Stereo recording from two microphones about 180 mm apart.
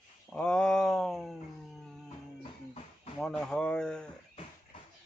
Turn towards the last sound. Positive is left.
turn(degrees=5)  # may be behind; listen again after turning